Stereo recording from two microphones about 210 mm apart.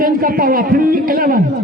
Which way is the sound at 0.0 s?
45° right (ahead or behind).